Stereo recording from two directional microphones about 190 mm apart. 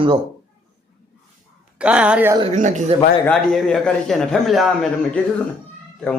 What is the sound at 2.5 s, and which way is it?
Speech, 40° right (ahead or behind).